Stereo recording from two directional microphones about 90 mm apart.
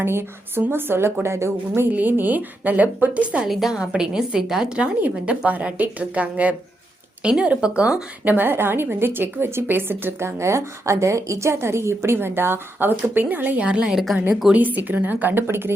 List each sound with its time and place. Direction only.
0.0 s a woman's voice: 25° right (ahead or behind)
13.6 s a woman's voice: 10° right (ahead or behind)
14.5 s a woman's voice: 20° right (ahead or behind)